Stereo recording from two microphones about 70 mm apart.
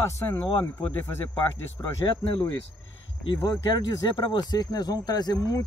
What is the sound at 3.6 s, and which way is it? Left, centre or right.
Speech, left.